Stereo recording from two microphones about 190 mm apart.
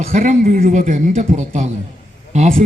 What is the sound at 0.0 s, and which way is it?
A man's voice, 45° right (ahead or behind).